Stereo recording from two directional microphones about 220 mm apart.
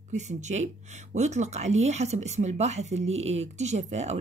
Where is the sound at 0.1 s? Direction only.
30° right (ahead or behind).